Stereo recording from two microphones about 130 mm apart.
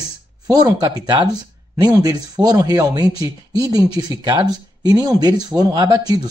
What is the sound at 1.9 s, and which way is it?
Speech, 30° right (ahead or behind).